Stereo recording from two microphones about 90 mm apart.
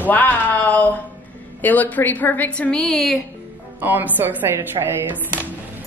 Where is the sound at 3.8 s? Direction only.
20° right (ahead or behind).